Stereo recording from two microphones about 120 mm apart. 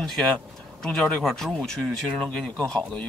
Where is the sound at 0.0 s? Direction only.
5° left (ahead or behind).